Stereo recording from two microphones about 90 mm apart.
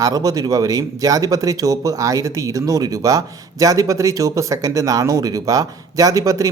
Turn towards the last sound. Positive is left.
turn(degrees=-40)  # may be behind; listen again after turning